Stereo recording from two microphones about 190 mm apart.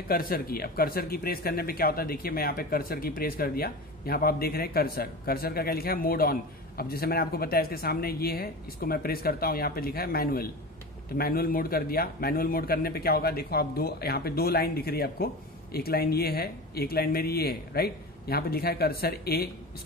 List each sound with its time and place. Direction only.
0.1 s speech: 50° left (ahead or behind)